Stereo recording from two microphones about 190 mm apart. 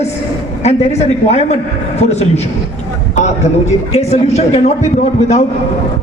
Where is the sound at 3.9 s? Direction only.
35° left (ahead or behind).